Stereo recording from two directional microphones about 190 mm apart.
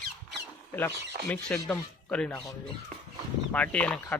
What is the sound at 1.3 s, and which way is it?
Speech, 5° left (ahead or behind).